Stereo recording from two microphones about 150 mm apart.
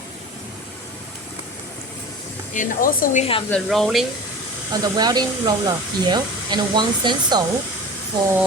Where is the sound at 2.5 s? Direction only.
65° left (ahead or behind).